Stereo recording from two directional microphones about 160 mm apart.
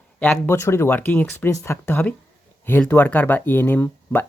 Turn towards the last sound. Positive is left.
turn(degrees=15)  # may be behind; listen again after turning